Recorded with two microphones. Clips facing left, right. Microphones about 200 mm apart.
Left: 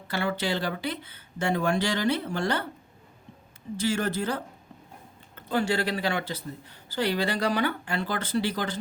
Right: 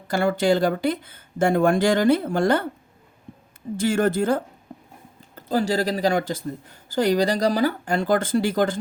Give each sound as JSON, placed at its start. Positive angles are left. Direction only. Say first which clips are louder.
{"t": 0.1, "sound": "speech", "louder": "right 9 dB", "side_deg": -45}
{"t": 3.8, "sound": "speech", "louder": "right 7 dB", "side_deg": -50}
{"t": 5.3, "sound": "speech", "louder": "right 4 dB", "side_deg": -35}